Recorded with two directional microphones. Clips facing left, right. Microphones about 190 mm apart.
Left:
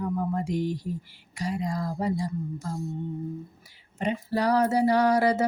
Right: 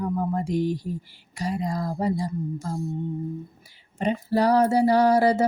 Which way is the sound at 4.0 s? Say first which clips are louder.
Right 4 dB; 35° right (ahead or behind).